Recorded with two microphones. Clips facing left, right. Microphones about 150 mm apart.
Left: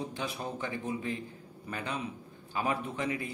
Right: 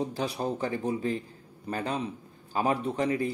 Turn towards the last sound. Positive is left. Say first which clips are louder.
# right 7 dB
turn(degrees=-35)  # may be behind; listen again after turning